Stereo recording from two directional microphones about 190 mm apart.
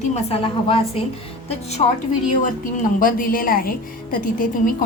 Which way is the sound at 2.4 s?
45° left (ahead or behind).